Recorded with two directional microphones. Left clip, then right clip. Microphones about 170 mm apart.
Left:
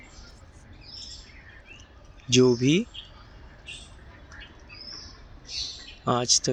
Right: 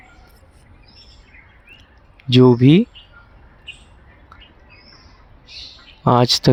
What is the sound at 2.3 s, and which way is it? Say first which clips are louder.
Speech: right 8 dB; 50° right (ahead or behind).